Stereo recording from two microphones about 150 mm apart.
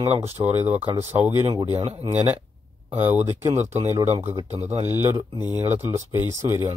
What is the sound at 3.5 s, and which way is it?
Speech, 50° right (ahead or behind).